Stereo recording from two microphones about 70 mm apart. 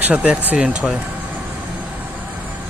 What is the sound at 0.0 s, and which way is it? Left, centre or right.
Speech, centre.